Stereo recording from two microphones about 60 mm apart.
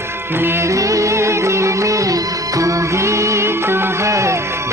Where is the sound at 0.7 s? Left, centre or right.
Right.